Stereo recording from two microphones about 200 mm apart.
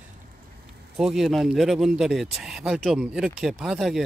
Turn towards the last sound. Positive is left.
turn(degrees=0)  # may be behind; listen again after turning